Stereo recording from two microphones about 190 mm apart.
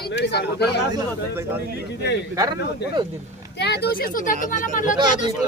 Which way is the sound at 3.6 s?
60° left (ahead or behind).